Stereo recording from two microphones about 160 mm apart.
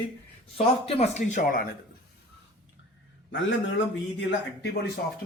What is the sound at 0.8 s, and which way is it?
Speech, 40° left (ahead or behind).